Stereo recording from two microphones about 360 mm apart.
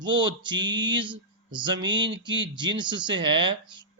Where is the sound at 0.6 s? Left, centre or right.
Right.